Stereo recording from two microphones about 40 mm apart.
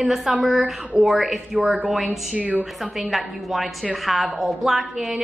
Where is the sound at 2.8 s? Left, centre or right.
Centre.